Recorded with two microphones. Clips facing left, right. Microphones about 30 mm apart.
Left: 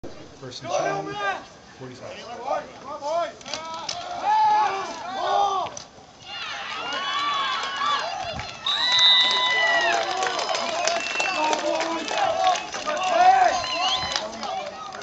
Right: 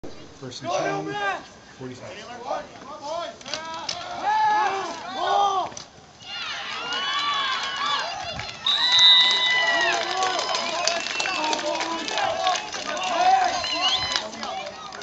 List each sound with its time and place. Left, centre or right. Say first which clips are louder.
0.7 s a man's voice: even; centre
0.9 s a man's voice: even; centre
3.1 s a sound: left 4 dB; centre
6.3 s run: even; centre
8.4 s crowd: right 4 dB; centre
9.4 s run: even; centre
10.4 s a sound: left 1 dB; centre
11.1 s applause: left 2 dB; centre
11.9 s a sound: left 2 dB; centre
13.0 s run: left 3 dB; centre